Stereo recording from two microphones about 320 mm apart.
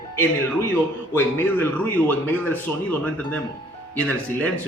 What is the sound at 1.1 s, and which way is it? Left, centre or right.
A man's voice, centre.